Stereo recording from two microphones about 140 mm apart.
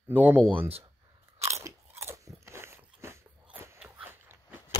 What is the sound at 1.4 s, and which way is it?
Biting, 20° right (ahead or behind).